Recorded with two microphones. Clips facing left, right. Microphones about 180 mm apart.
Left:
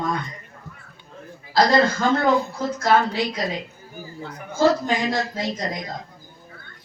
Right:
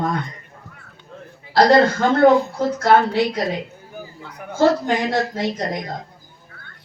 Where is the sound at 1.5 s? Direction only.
60° right (ahead or behind).